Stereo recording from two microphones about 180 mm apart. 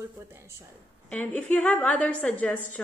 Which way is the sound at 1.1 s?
10° left (ahead or behind).